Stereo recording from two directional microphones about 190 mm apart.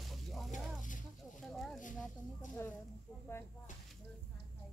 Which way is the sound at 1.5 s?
Centre (ahead or behind).